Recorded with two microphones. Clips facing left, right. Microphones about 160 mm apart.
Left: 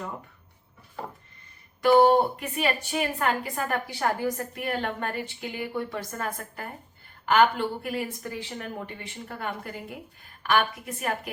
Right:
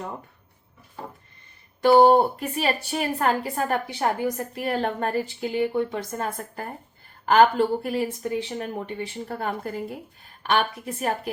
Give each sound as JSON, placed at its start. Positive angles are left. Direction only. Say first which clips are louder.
{"t": 1.8, "sound": "speech", "louder": "right 3 dB", "side_deg": -35}
{"t": 3.8, "sound": "a woman's voice", "louder": "right 2 dB", "side_deg": -20}